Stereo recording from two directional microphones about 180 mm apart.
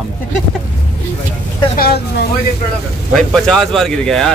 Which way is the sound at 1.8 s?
60° left (ahead or behind).